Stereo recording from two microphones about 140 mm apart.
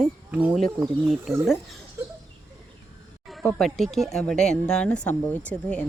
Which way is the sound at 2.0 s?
15° right (ahead or behind).